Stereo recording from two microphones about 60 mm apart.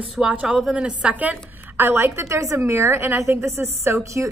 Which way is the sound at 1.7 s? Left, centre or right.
Right.